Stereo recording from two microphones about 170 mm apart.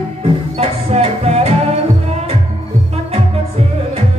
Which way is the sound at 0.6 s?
35° right (ahead or behind).